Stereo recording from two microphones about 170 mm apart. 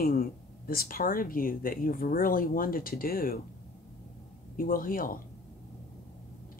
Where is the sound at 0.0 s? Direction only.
60° left (ahead or behind).